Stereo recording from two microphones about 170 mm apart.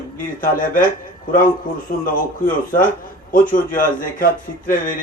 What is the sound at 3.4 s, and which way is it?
Speech, 50° left (ahead or behind).